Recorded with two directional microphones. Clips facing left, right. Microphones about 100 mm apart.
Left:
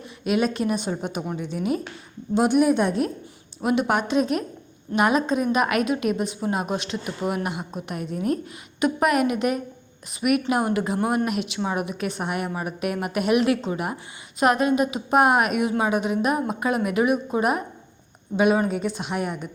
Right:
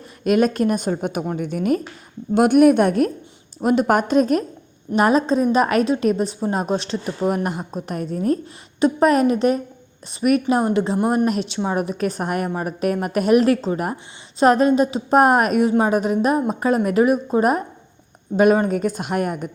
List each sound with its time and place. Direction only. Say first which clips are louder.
0.3 s a woman's voice: right 5 dB; 45° right (ahead or behind)
3.6 s a woman's voice: right 5 dB; 40° right (ahead or behind)